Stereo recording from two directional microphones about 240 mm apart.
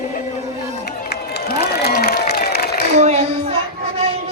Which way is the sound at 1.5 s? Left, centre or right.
Left.